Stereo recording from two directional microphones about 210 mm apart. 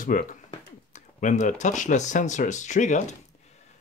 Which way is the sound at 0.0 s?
40° left (ahead or behind).